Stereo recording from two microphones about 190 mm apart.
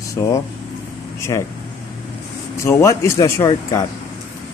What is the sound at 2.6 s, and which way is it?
Speech, 15° left (ahead or behind).